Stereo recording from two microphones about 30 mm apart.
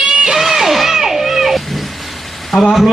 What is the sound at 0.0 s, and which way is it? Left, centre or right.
Music, right.